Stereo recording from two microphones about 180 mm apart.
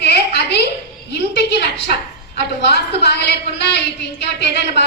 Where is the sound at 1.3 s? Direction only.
65° left (ahead or behind).